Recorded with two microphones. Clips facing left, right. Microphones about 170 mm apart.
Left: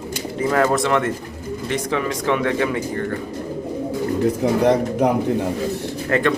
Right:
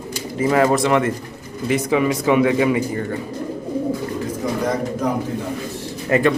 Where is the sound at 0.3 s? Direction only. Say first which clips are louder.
Right 2 dB; 5° right (ahead or behind).